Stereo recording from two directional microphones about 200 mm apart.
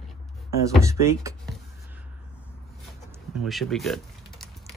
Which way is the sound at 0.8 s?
15° right (ahead or behind).